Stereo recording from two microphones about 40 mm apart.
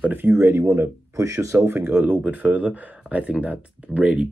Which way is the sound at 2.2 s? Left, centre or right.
Right.